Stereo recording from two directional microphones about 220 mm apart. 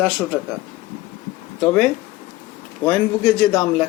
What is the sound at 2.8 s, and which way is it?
Speech, 5° left (ahead or behind).